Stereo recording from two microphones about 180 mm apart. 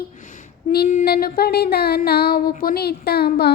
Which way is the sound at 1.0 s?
60° left (ahead or behind).